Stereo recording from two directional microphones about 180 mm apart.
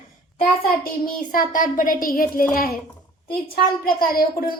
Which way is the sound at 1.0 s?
50° left (ahead or behind).